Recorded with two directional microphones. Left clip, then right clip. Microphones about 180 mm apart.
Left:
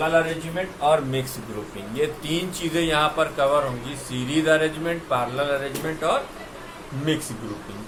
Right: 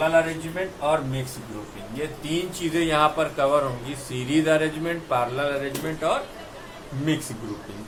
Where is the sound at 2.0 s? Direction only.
30° left (ahead or behind).